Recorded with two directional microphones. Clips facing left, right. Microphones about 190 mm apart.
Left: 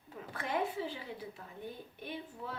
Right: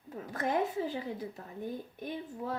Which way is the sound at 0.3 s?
45° right (ahead or behind).